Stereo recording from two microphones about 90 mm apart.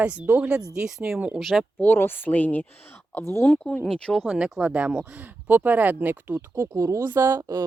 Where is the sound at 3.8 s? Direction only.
5° left (ahead or behind).